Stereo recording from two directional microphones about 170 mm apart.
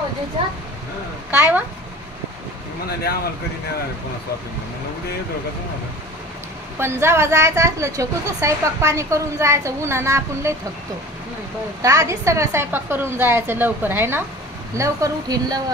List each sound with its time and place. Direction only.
1.3 s speech: 10° right (ahead or behind)
6.8 s speech: 15° right (ahead or behind)
11.8 s speech: 20° right (ahead or behind)